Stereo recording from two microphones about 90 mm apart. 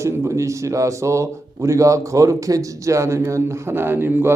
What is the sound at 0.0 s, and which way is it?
A man's voice, 35° right (ahead or behind).